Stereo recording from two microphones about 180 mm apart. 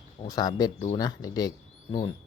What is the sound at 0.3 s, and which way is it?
Speech, 20° left (ahead or behind).